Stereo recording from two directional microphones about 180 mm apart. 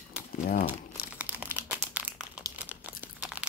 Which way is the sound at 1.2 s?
10° right (ahead or behind).